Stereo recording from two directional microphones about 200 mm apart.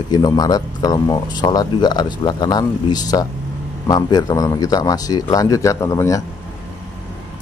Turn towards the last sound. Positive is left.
turn(degrees=15)  # may be behind; listen again after turning